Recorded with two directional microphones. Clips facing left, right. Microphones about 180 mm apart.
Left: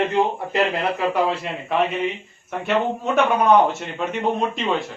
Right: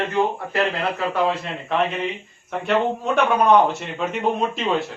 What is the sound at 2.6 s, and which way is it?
A man's voice, centre (ahead or behind).